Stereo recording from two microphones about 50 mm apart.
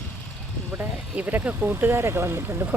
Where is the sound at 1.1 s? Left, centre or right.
Right.